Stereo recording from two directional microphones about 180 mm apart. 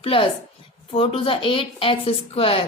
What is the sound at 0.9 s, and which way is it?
A woman's voice, 30° left (ahead or behind).